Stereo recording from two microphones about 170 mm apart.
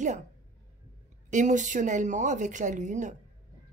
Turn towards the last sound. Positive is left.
turn(degrees=-45)  # may be behind; listen again after turning